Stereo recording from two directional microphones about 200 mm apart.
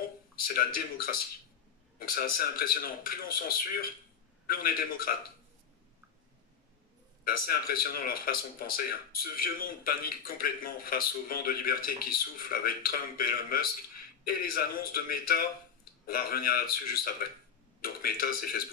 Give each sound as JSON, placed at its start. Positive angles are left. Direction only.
{"t": 0.4, "sound": "speech", "side_deg": 45}
{"t": 7.2, "sound": "speech", "side_deg": 50}